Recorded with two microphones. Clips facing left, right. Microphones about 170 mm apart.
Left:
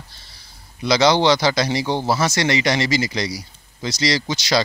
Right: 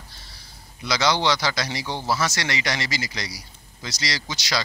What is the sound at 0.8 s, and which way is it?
Speech, 25° left (ahead or behind).